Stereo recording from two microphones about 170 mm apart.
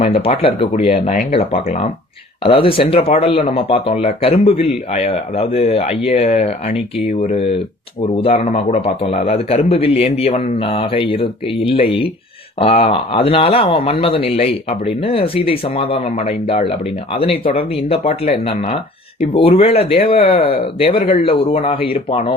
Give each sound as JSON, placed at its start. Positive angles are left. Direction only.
{"t": 0.0, "sound": "a man's voice", "side_deg": 35}